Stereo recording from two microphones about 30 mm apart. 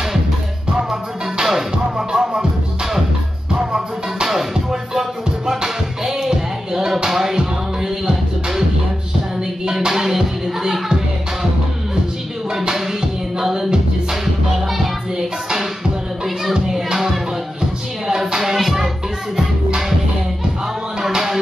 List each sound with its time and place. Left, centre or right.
0.7 s music: right
4.3 s music: centre
9.7 s music: centre
12.5 s music: centre
15.1 s music: centre
18.0 s music: centre